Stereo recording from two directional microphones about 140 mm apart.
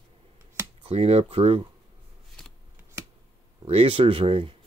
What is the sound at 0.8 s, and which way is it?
Speech, 45° right (ahead or behind).